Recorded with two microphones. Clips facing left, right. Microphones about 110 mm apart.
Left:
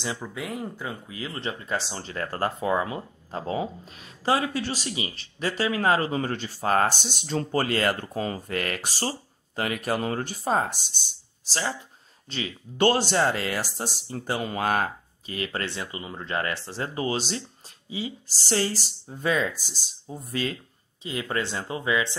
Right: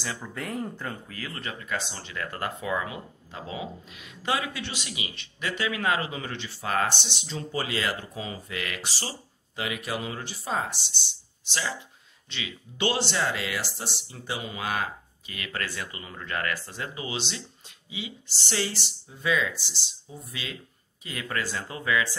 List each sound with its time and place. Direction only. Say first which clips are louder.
0.0 s speech: left 3 dB; 20° left (ahead or behind)
0.3 s speech: even; 5° left (ahead or behind); by 15.3 s 45° left (ahead or behind)
15.3 s speech: left 4 dB; 30° left (ahead or behind); by 20.5 s 45° left (ahead or behind)
21.0 s speech: left 3 dB; 25° left (ahead or behind)